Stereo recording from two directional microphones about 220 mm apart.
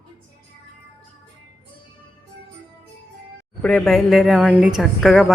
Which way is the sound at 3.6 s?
5° left (ahead or behind).